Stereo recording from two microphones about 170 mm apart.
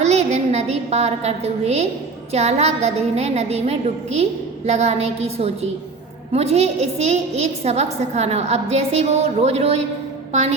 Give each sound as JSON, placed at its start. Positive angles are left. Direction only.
{"t": 0.0, "sound": "a woman's voice", "side_deg": -40}